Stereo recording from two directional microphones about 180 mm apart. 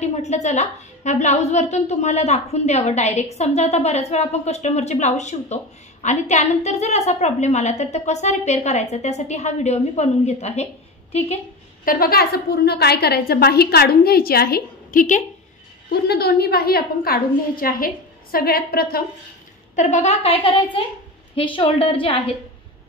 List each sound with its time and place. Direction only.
0.0 s a woman's voice: 40° left (ahead or behind)
11.8 s a woman's voice: 55° left (ahead or behind)
15.9 s a woman's voice: 60° left (ahead or behind)
19.7 s a woman's voice: 45° left (ahead or behind)